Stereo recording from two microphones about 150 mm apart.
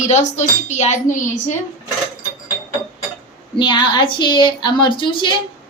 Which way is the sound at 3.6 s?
30° left (ahead or behind).